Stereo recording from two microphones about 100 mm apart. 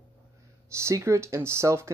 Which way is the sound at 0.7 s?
30° right (ahead or behind).